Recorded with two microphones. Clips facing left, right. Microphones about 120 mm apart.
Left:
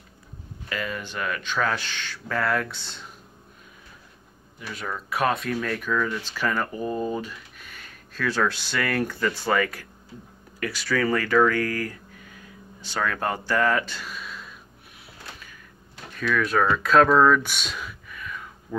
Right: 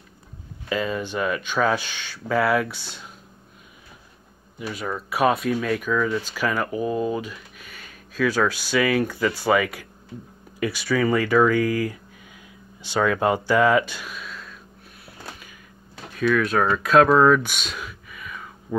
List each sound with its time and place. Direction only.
0.7 s speech: 20° right (ahead or behind)
4.8 s speech: 10° right (ahead or behind)
14.1 s a sound: centre (ahead or behind)
16.3 s speech: 5° right (ahead or behind)
18.7 s speech: 20° right (ahead or behind)